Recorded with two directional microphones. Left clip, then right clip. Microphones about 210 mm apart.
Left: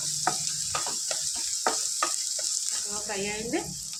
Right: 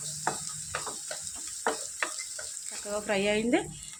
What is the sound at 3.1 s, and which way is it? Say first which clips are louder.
Speech: right 7 dB; 50° right (ahead or behind).